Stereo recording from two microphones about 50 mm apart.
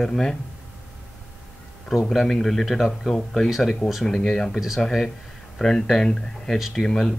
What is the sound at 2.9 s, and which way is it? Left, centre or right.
Speech, centre.